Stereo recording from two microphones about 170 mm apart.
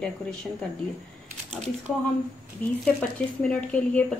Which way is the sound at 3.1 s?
5° left (ahead or behind).